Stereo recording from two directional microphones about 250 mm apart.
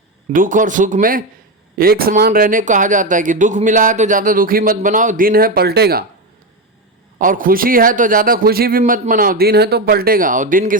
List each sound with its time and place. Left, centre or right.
0.3 s speech: right
7.2 s speech: right